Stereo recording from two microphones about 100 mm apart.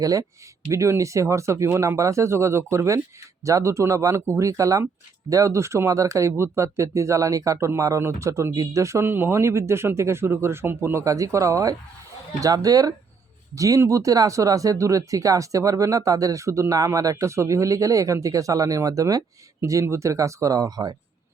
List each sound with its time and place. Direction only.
0.0 s speech: 35° right (ahead or behind)